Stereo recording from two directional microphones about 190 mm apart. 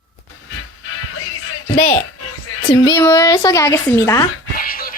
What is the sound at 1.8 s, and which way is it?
Speech, 40° left (ahead or behind).